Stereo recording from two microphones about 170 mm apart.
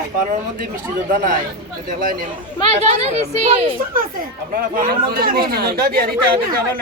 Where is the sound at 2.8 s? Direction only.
40° right (ahead or behind).